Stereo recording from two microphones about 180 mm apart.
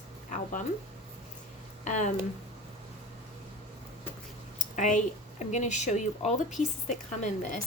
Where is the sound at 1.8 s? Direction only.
45° left (ahead or behind).